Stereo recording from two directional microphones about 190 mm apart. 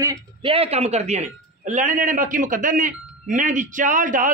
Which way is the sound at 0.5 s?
30° right (ahead or behind).